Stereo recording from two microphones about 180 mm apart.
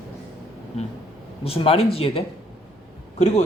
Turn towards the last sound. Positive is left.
turn(degrees=40)  # may be behind; listen again after turning